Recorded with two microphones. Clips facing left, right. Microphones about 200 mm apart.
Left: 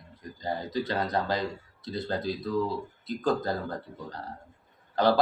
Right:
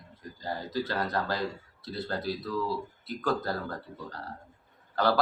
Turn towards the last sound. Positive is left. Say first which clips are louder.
# left 3 dB
turn(degrees=20)  # may be behind; listen again after turning